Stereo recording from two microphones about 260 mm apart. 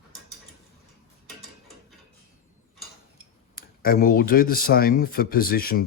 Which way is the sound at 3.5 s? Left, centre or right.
Left.